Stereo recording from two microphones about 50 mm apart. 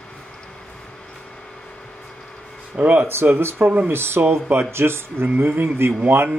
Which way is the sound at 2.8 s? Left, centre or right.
Right.